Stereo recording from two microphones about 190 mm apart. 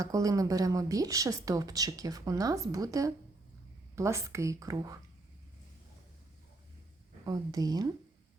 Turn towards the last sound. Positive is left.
turn(degrees=-20)  # may be behind; listen again after turning